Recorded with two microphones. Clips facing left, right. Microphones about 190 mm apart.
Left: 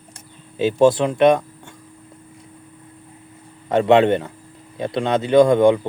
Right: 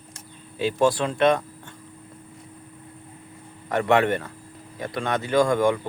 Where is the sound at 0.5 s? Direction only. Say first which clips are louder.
Left 6 dB; 20° left (ahead or behind).